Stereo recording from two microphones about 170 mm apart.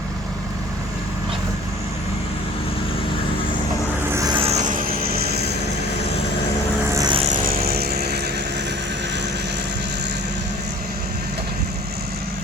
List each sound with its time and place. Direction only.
4.1 s a sound: 20° right (ahead or behind)
4.4 s vehicle: 40° right (ahead or behind); by 5.4 s 65° right (ahead or behind)
6.9 s vehicle: 20° right (ahead or behind)
7.4 s vehicle: 60° right (ahead or behind)